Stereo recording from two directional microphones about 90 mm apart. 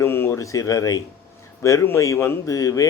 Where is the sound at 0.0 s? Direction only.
25° left (ahead or behind).